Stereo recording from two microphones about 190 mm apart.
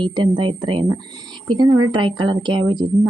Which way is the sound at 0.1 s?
25° right (ahead or behind).